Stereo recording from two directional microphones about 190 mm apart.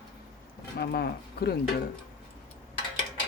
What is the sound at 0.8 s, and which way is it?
Speech, 55° left (ahead or behind).